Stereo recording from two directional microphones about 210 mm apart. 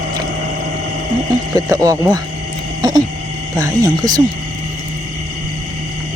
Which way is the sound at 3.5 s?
15° right (ahead or behind).